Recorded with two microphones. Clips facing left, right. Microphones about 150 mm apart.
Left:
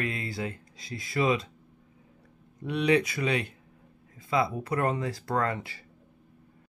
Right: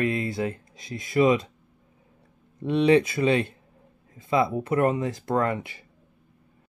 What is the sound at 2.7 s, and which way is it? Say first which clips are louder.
Speech: right 6 dB; 25° right (ahead or behind).